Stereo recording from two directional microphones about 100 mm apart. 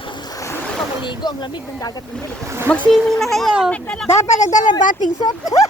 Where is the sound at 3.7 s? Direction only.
10° left (ahead or behind).